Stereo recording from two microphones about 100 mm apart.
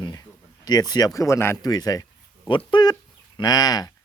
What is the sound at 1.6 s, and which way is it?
Speech, 40° left (ahead or behind).